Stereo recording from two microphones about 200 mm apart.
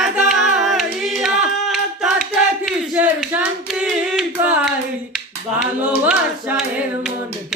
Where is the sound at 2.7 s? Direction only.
5° right (ahead or behind).